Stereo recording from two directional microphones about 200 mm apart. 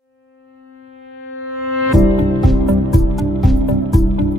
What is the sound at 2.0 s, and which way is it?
Music, centre (ahead or behind).